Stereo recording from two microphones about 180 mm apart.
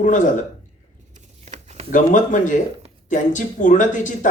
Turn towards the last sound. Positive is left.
turn(degrees=45)  # may be behind; listen again after turning